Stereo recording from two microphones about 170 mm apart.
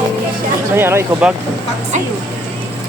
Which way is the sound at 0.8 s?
15° right (ahead or behind).